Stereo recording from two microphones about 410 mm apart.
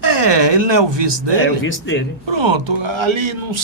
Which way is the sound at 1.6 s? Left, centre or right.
Left.